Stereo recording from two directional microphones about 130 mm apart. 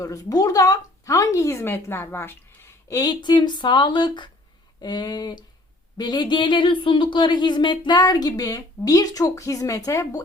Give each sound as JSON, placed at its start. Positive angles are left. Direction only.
{"t": 0.0, "sound": "speech", "side_deg": 25}
{"t": 2.9, "sound": "speech", "side_deg": 30}